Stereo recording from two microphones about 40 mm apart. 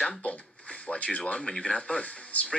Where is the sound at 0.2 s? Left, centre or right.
Left.